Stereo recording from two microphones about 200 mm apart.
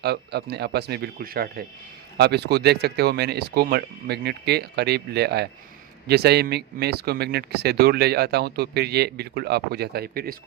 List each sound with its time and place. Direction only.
0.0 s speech: 55° right (ahead or behind)